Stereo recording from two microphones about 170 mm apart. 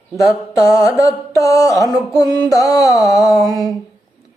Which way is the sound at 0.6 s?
20° left (ahead or behind).